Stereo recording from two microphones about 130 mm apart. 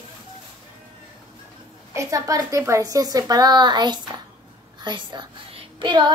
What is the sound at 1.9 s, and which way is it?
A woman's voice, 25° right (ahead or behind).